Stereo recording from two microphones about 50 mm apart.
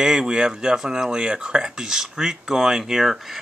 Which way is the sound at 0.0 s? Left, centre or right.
Centre.